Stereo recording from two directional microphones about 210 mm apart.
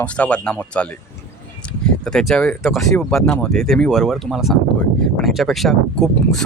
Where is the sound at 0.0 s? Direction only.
5° left (ahead or behind).